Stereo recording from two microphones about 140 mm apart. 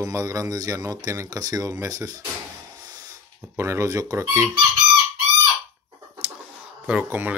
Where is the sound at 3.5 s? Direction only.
20° right (ahead or behind).